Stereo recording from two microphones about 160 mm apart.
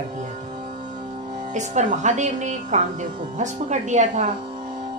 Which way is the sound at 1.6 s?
50° right (ahead or behind).